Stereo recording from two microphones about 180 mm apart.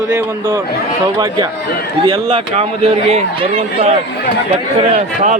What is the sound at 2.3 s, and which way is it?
Speech, 35° right (ahead or behind).